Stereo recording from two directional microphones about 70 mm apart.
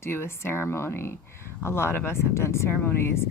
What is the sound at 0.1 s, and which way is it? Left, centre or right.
Speech, left.